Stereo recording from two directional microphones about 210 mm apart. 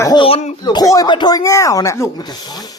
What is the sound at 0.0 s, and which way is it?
Speech, 20° left (ahead or behind).